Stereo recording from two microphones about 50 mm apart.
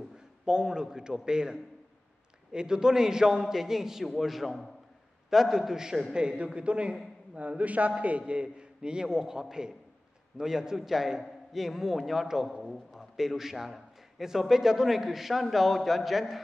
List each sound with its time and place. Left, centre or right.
0.5 s a man's voice: centre
6.1 s a man's voice: right; by 16.3 s centre